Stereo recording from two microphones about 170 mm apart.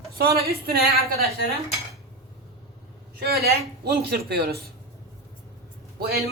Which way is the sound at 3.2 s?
65° right (ahead or behind).